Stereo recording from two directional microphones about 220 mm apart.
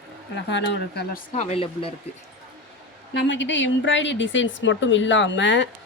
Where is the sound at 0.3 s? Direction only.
55° left (ahead or behind).